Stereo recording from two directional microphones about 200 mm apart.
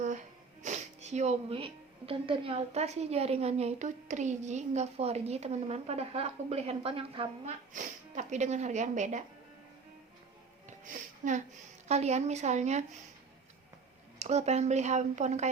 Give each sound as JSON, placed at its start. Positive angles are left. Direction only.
{"t": 0.6, "sound": "speech", "side_deg": -35}
{"t": 7.7, "sound": "speech", "side_deg": -40}
{"t": 10.7, "sound": "a sound", "side_deg": -40}
{"t": 11.9, "sound": "speech", "side_deg": -35}
{"t": 14.2, "sound": "speech", "side_deg": -35}